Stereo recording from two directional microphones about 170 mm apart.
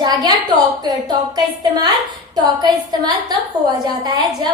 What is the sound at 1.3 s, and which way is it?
A woman's voice, 25° right (ahead or behind).